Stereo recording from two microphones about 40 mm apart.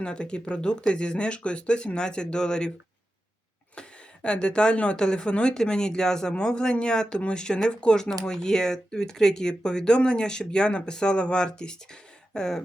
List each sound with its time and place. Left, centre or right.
0.0 s speech: left
3.8 s speech: left
12.3 s a sound: centre